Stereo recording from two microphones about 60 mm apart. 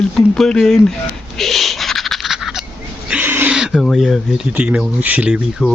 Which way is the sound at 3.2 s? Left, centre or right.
Right.